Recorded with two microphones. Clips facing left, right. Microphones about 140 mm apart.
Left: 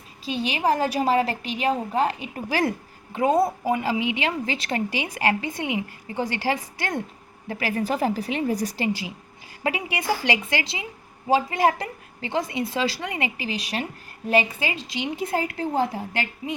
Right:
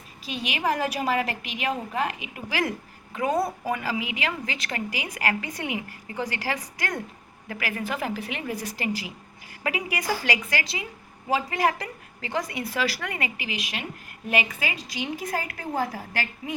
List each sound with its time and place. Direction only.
0.3 s a woman's voice: 30° left (ahead or behind)